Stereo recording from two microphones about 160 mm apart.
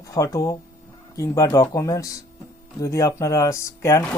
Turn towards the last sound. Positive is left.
turn(degrees=20)  # may be behind; listen again after turning